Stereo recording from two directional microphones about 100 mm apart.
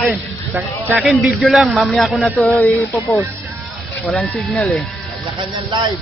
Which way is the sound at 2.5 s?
15° left (ahead or behind).